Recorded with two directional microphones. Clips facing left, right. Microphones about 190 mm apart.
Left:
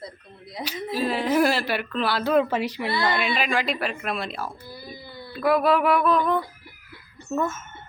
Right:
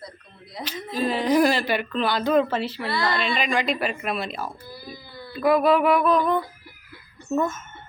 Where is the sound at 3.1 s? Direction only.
5° left (ahead or behind).